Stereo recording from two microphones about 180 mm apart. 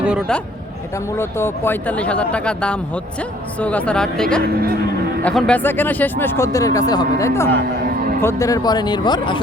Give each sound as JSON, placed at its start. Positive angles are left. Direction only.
{"t": 1.2, "sound": "speech", "side_deg": 15}